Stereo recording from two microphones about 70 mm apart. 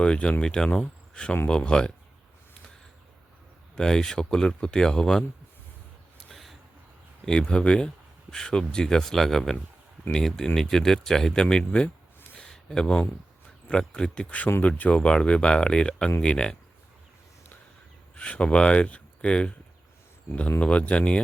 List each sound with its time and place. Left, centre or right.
0.0 s speech: centre
3.8 s speech: centre
6.1 s a sound: centre
7.3 s speech: centre
12.5 s a sound: centre
13.7 s speech: centre
18.1 s speech: centre
20.6 s speech: centre